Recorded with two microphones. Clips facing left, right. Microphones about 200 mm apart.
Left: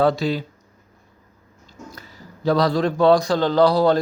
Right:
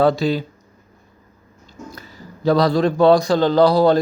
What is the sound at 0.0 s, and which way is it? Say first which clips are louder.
Speech: right 3 dB; 30° right (ahead or behind).